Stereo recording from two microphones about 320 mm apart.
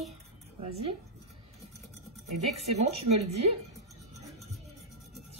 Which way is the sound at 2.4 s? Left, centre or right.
Right.